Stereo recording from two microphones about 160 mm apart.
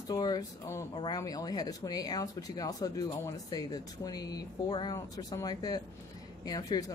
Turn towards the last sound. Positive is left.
turn(degrees=25)  # may be behind; listen again after turning